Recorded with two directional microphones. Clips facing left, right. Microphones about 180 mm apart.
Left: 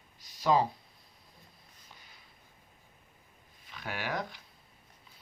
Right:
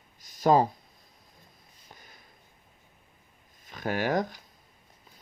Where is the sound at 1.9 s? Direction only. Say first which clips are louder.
Right 5 dB; 45° right (ahead or behind).